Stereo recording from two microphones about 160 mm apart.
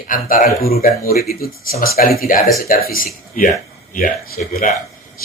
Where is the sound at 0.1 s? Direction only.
60° left (ahead or behind).